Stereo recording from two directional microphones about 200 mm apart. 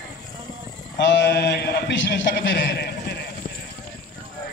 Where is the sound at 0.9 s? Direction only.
65° left (ahead or behind).